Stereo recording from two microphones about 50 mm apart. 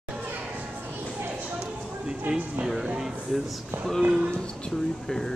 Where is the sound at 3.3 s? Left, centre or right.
Centre.